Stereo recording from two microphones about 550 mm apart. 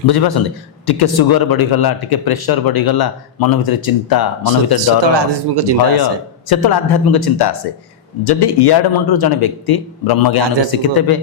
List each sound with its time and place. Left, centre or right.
0.1 s speech: left
4.8 s speech: right
6.5 s speech: left